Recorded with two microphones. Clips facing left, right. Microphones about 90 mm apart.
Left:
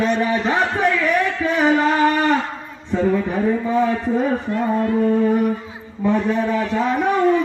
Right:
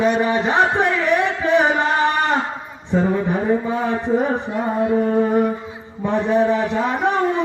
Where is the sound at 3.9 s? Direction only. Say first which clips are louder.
Even; 25° right (ahead or behind).